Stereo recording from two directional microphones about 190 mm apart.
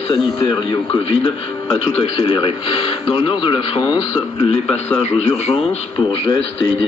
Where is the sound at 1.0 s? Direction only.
30° left (ahead or behind).